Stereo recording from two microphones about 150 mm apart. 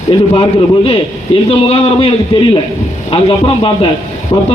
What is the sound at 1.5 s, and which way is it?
A man's voice, 40° left (ahead or behind).